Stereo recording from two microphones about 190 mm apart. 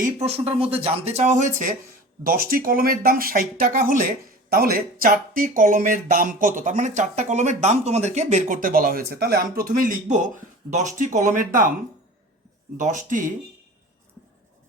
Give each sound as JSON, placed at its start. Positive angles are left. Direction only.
{"t": 0.0, "sound": "speech", "side_deg": -35}
{"t": 12.7, "sound": "speech", "side_deg": -40}